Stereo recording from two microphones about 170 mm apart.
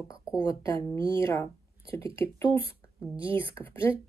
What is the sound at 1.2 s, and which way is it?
Speech, 15° left (ahead or behind).